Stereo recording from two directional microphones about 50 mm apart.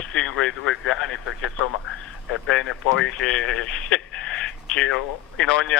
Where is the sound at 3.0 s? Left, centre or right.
Centre.